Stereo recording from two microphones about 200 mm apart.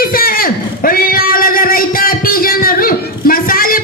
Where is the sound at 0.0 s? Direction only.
45° left (ahead or behind).